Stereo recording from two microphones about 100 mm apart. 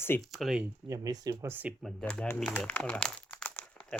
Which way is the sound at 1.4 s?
20° right (ahead or behind).